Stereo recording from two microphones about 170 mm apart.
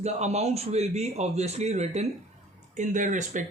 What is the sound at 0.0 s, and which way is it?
A man's voice, 40° right (ahead or behind).